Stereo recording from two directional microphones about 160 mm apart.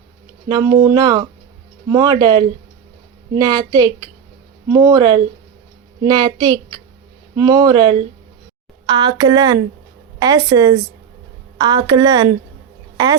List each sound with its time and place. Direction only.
0.4 s speech: 25° right (ahead or behind)